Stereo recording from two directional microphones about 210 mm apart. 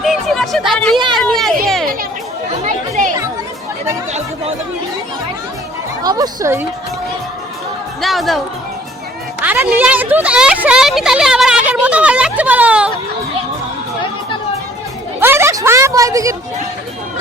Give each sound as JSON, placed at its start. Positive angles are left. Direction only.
{"t": 0.0, "sound": "a sound", "side_deg": 0}
{"t": 0.7, "sound": "a woman's voice", "side_deg": 5}
{"t": 2.6, "sound": "chatter", "side_deg": -35}
{"t": 6.0, "sound": "speech", "side_deg": -20}
{"t": 8.0, "sound": "a woman's voice", "side_deg": 0}
{"t": 9.4, "sound": "a woman's voice", "side_deg": -10}
{"t": 15.2, "sound": "a woman's voice", "side_deg": -10}